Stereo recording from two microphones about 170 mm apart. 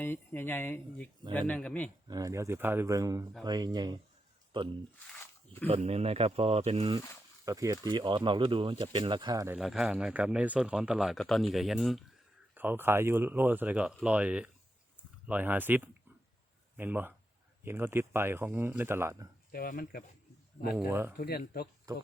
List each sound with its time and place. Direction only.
0.0 s speech: 10° left (ahead or behind)
2.0 s speech: 20° right (ahead or behind)
5.1 s a sound: 10° left (ahead or behind)
5.6 s speech: 35° right (ahead or behind)
7.4 s speech: 20° right (ahead or behind)
9.6 s speech: centre (ahead or behind)
12.5 s speech: 10° right (ahead or behind)
19.5 s speech: 60° left (ahead or behind)
20.7 s speech: 10° right (ahead or behind)
21.2 s speech: 65° left (ahead or behind)